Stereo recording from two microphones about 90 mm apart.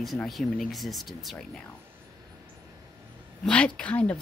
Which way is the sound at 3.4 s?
15° left (ahead or behind).